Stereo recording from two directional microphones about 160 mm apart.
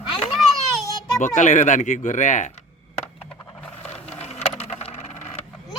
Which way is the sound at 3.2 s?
10° left (ahead or behind).